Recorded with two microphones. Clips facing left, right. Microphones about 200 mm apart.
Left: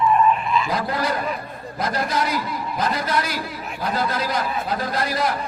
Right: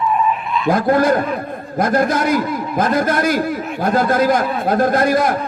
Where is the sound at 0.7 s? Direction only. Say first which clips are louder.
Right 10 dB; 50° right (ahead or behind).